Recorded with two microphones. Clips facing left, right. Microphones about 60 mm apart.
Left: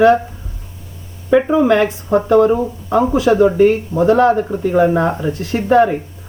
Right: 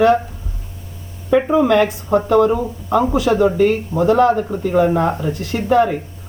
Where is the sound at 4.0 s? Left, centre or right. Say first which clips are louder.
Left 2 dB; left.